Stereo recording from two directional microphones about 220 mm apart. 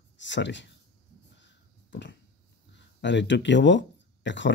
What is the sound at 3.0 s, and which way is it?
Speech, 55° left (ahead or behind).